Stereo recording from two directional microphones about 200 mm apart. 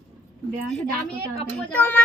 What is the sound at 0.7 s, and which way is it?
Speech, 5° left (ahead or behind).